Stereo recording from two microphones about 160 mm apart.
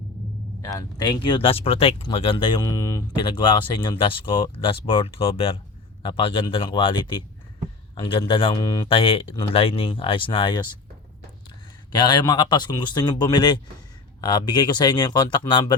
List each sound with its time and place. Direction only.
0.6 s speech: 20° left (ahead or behind)
2.6 s a man's voice: 20° left (ahead or behind)
3.2 s speech: 30° left (ahead or behind)
8.5 s a man's voice: 20° left (ahead or behind)
8.9 s speech: 35° left (ahead or behind)
11.9 s a man's voice: 25° left (ahead or behind)